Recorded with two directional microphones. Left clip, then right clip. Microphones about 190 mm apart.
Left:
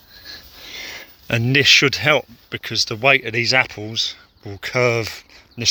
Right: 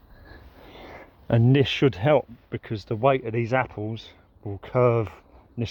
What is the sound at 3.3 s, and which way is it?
Speech, 5° left (ahead or behind).